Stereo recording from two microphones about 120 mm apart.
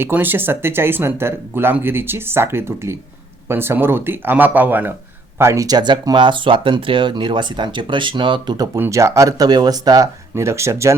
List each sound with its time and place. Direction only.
0.0 s speech: 15° right (ahead or behind)